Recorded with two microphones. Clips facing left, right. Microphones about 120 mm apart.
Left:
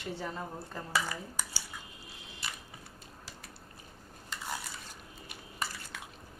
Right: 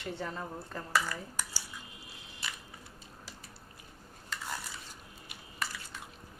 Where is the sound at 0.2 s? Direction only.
15° left (ahead or behind).